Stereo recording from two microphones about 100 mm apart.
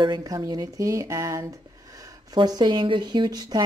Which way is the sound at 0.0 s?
40° right (ahead or behind).